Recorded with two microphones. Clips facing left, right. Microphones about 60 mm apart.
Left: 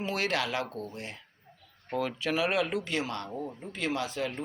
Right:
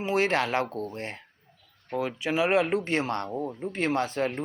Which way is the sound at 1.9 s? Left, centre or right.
Centre.